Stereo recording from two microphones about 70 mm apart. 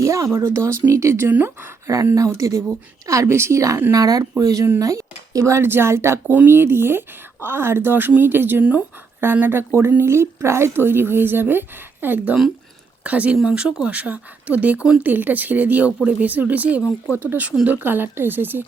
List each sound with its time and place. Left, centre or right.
0.0 s a sound: right
0.3 s a woman's voice: right
3.9 s a woman's voice: right; by 13.3 s centre
13.3 s speech: centre
16.8 s speech: left
17.2 s speech: right